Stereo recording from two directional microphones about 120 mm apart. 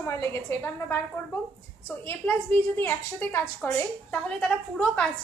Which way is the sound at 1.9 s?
15° left (ahead or behind).